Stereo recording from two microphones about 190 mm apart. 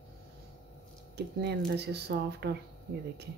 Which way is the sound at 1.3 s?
60° right (ahead or behind).